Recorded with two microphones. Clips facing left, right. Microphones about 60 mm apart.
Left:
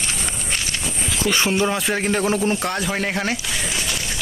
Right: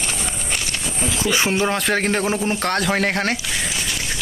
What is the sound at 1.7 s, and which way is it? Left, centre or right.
Speech, right.